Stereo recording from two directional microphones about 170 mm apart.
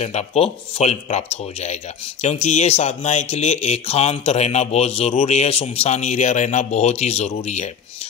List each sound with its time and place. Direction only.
0.0 s speech: 40° left (ahead or behind)